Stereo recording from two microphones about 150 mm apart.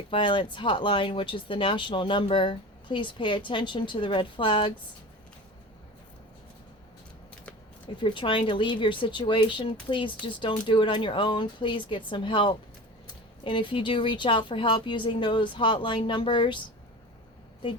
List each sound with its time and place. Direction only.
0.1 s speech: 35° left (ahead or behind)
8.0 s speech: 35° left (ahead or behind)